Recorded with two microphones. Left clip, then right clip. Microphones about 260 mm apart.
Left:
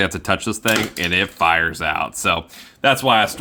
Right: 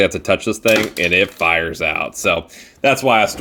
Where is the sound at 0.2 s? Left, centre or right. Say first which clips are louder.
Right 4 dB; left.